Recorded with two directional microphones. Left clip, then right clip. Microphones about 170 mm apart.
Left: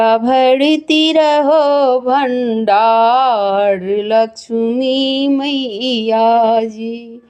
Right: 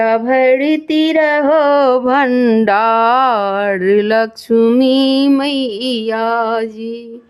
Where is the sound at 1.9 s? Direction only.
25° right (ahead or behind).